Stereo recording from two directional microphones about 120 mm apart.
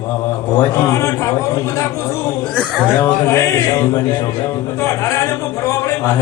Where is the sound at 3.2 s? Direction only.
25° left (ahead or behind).